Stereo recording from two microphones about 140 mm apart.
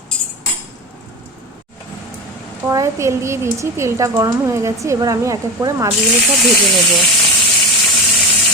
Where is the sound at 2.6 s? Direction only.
20° right (ahead or behind).